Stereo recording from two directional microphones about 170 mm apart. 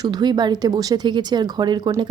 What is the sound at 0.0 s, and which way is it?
Speech, 25° right (ahead or behind).